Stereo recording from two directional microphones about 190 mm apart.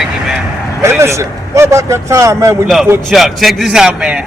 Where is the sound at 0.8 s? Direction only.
15° right (ahead or behind).